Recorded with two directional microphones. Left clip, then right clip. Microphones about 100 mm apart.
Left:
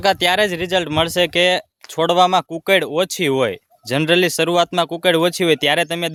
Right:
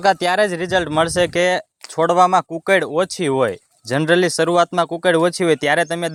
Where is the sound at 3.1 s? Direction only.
25° left (ahead or behind).